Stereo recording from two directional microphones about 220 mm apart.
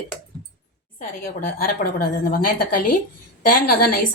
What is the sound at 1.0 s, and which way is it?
A woman's voice, 40° left (ahead or behind).